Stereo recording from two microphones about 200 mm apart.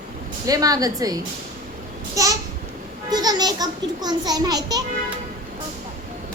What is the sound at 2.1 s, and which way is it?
Babbling, 15° right (ahead or behind).